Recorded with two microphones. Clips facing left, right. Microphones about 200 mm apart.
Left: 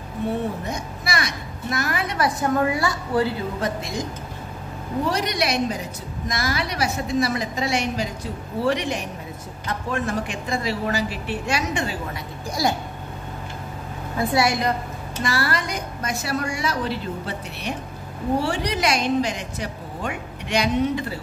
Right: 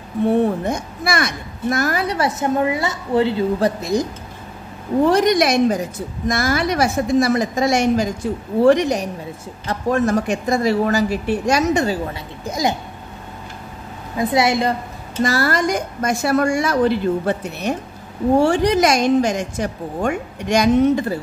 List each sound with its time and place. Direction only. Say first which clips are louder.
0.7 s a woman's voice: right 7 dB; 50° right (ahead or behind); by 3.7 s 25° right (ahead or behind)
3.8 s speech: right 9 dB; 40° right (ahead or behind)
5.0 s a woman's voice: right 10 dB; 50° right (ahead or behind)
12.4 s a woman's voice: right 3 dB; 20° right (ahead or behind)
14.1 s a woman's voice: right 4 dB; 20° right (ahead or behind)
15.2 s a woman's voice: right 7 dB; 45° right (ahead or behind)